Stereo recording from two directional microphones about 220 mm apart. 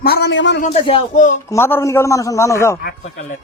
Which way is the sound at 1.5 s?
10° left (ahead or behind).